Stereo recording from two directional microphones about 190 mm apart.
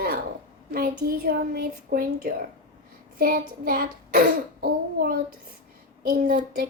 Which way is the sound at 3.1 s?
50° right (ahead or behind).